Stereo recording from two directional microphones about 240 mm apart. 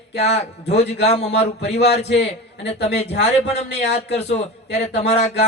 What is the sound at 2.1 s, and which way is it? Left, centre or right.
Speech, left.